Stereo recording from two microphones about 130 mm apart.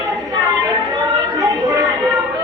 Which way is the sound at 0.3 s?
30° right (ahead or behind).